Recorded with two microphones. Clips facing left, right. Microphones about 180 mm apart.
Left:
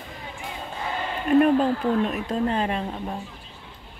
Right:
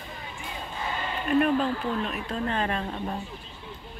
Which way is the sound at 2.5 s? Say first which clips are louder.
Left 3 dB; 20° left (ahead or behind).